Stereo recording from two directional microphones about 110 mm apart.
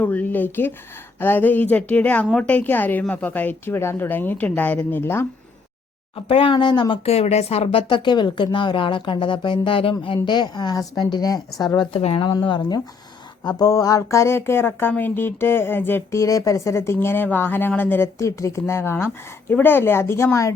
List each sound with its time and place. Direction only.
0.0 s a woman's voice: 15° left (ahead or behind)
6.2 s speech: 55° left (ahead or behind)
7.0 s speech: 70° left (ahead or behind); by 9.9 s 50° left (ahead or behind)
10.2 s a woman's voice: 40° left (ahead or behind)
11.9 s speech: 65° left (ahead or behind); by 16.2 s 20° left (ahead or behind)
16.2 s speech: 30° left (ahead or behind)